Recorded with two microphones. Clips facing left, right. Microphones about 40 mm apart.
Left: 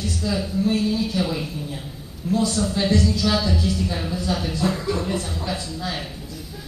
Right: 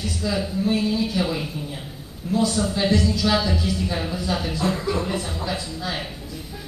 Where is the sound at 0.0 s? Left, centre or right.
Centre.